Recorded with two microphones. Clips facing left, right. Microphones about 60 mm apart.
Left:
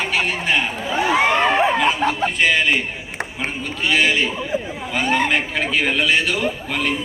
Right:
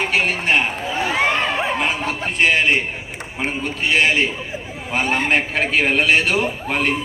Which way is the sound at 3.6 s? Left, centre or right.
Right.